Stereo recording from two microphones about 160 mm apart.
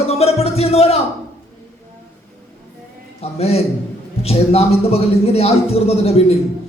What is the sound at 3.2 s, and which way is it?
A man's voice, 40° left (ahead or behind).